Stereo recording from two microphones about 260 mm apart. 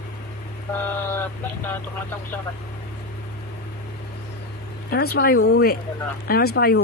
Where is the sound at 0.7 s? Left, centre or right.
Centre.